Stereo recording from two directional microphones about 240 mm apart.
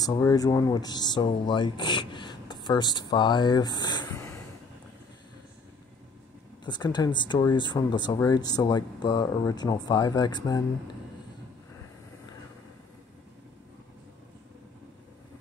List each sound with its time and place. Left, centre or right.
0.0 s speech: centre
6.6 s speech: centre